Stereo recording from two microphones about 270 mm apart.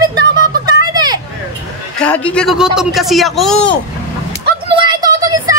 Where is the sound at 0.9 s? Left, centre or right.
Centre.